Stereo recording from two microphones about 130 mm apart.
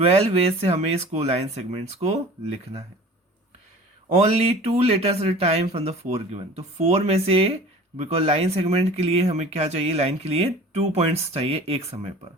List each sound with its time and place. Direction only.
0.0 s speech: 50° right (ahead or behind)
4.1 s speech: 55° right (ahead or behind)